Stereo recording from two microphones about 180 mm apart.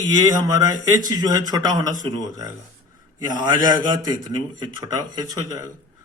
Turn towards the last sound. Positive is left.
turn(degrees=-20)  # may be behind; listen again after turning